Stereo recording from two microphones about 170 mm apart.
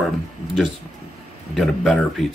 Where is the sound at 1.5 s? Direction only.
Centre (ahead or behind).